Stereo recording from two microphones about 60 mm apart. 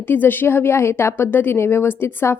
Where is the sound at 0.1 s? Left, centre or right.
Left.